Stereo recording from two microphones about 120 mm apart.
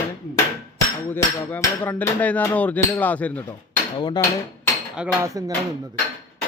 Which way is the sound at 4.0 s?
35° left (ahead or behind).